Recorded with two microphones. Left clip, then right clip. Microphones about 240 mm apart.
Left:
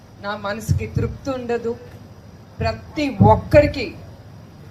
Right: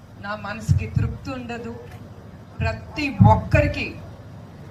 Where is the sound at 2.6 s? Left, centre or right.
Left.